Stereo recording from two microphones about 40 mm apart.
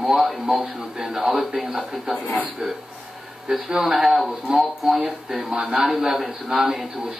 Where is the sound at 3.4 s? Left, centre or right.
Centre.